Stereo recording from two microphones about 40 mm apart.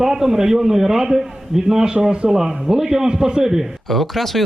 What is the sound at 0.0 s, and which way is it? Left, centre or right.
A man's voice, centre.